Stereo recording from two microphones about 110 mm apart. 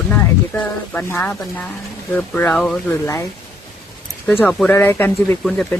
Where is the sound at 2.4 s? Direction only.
5° left (ahead or behind).